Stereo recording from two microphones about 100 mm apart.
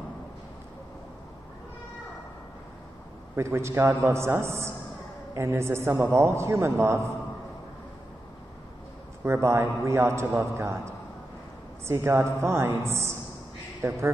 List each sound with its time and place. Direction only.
3.3 s a man's voice: 30° right (ahead or behind)
9.2 s a man's voice: 25° right (ahead or behind)